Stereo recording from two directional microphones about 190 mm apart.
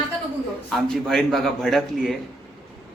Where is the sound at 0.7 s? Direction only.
Centre (ahead or behind).